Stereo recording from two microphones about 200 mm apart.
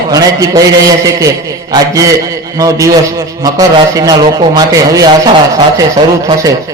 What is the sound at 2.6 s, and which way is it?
A man's voice, 15° right (ahead or behind).